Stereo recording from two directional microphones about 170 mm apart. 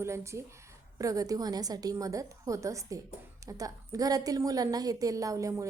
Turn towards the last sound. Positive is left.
turn(degrees=-20)  # may be behind; listen again after turning